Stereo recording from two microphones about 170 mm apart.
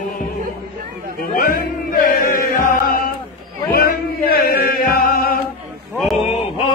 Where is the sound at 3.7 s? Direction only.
60° left (ahead or behind).